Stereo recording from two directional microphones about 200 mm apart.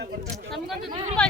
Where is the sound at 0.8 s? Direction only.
25° right (ahead or behind).